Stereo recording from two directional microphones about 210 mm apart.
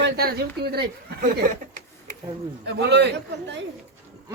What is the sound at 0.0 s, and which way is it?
Speech, 50° right (ahead or behind).